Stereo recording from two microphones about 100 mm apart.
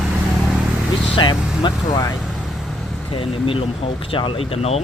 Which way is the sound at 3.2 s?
65° left (ahead or behind).